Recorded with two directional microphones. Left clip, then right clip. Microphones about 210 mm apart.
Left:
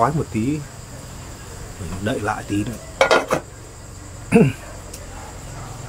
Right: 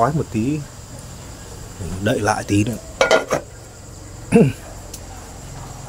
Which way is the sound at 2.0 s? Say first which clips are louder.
Right 5 dB; 25° right (ahead or behind).